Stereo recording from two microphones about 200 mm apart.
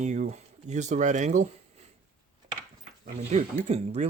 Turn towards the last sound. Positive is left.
turn(degrees=-35)  # may be behind; listen again after turning